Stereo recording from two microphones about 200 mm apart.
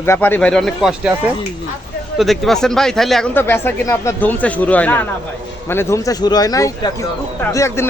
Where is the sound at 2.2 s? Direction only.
Centre (ahead or behind).